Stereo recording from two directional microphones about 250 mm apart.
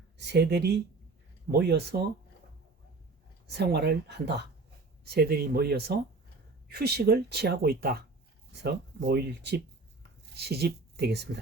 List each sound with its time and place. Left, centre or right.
0.2 s speech: right
3.5 s speech: right